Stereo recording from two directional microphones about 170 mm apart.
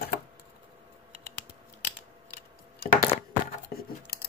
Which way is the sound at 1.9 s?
55° left (ahead or behind).